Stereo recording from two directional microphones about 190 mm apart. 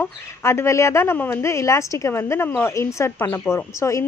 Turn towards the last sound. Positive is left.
turn(degrees=15)  # may be behind; listen again after turning